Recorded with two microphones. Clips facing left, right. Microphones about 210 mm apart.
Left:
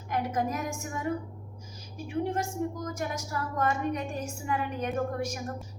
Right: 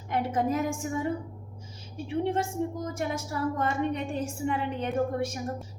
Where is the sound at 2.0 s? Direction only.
30° right (ahead or behind).